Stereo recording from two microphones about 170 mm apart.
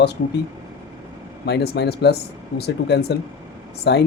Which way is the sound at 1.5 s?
75° left (ahead or behind).